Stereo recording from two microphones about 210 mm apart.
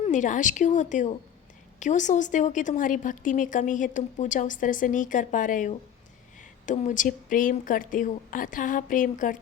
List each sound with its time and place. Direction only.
0.0 s a woman's voice: 35° left (ahead or behind)